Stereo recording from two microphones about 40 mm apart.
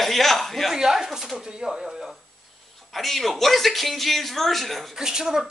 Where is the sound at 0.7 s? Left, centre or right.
Centre.